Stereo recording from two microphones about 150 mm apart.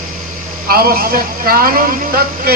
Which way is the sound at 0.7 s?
80° right.